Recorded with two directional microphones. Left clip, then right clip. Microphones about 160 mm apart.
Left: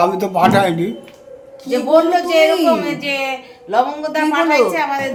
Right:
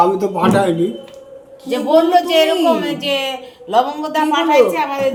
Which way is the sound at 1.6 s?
15° right (ahead or behind).